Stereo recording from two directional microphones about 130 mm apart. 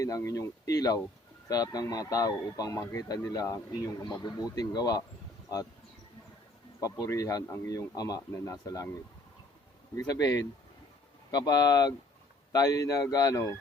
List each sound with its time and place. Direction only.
0.0 s speech: 25° left (ahead or behind)
7.0 s speech: 25° left (ahead or behind)
9.9 s speech: 25° left (ahead or behind)